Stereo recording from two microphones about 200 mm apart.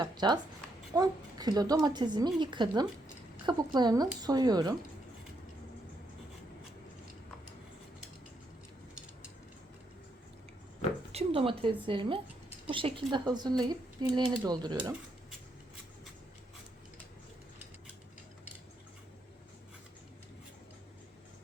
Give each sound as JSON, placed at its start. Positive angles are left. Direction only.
{"t": 0.0, "sound": "a woman's voice", "side_deg": -20}
{"t": 11.1, "sound": "a sound", "side_deg": -30}
{"t": 11.9, "sound": "speech", "side_deg": -25}